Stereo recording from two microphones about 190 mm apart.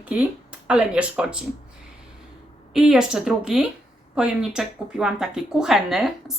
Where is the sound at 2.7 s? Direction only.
5° right (ahead or behind).